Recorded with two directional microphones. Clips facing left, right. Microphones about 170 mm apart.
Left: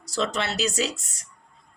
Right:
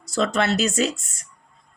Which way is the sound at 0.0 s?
50° right (ahead or behind).